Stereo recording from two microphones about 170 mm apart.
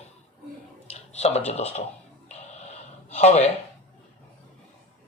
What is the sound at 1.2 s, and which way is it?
Speech, 40° left (ahead or behind).